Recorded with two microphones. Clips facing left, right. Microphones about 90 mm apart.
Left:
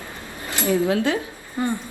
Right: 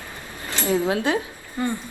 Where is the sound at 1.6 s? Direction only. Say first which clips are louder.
Left 1 dB; 20° left (ahead or behind).